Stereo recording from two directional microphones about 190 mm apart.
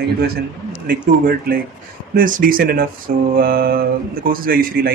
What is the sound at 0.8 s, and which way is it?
Speech, 50° right (ahead or behind).